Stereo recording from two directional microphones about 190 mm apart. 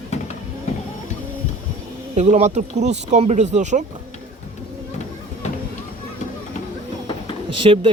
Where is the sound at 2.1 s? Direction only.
40° right (ahead or behind).